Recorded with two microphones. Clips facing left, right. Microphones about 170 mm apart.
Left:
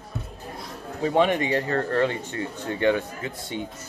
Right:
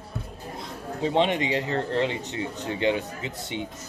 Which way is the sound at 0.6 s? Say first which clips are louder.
Left 1 dB; 25° right (ahead or behind).